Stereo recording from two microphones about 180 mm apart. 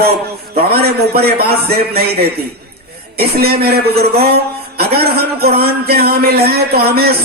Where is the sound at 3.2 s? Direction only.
60° right (ahead or behind).